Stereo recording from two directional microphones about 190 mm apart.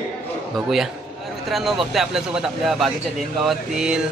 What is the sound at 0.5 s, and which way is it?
A man's voice, centre (ahead or behind).